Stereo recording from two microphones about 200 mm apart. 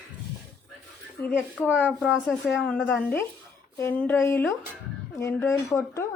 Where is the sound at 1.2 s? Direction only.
10° left (ahead or behind).